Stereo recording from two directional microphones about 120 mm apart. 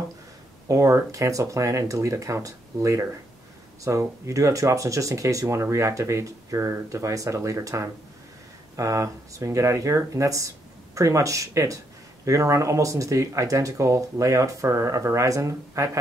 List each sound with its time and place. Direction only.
0.7 s speech: 25° right (ahead or behind)